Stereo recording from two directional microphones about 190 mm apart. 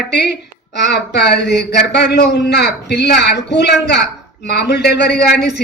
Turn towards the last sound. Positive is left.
turn(degrees=60)  # may be behind; listen again after turning